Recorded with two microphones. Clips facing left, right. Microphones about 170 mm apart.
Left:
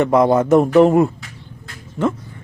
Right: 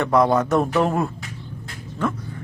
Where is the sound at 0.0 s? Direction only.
20° left (ahead or behind).